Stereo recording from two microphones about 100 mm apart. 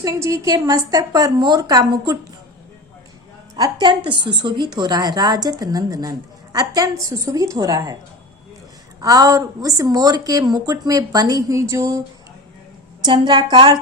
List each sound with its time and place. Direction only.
0.0 s a woman's voice: 30° right (ahead or behind)
3.5 s a woman's voice: 40° right (ahead or behind)
9.0 s a woman's voice: 35° right (ahead or behind)
13.1 s a woman's voice: 45° right (ahead or behind)